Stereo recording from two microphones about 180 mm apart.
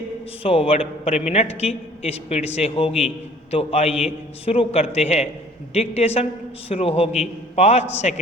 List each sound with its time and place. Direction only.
0.4 s a man's voice: 35° left (ahead or behind)